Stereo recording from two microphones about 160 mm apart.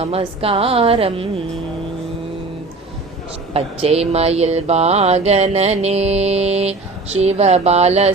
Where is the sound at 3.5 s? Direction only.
40° right (ahead or behind).